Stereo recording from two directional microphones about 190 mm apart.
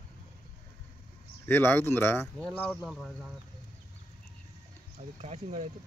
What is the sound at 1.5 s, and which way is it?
Speech, 10° left (ahead or behind).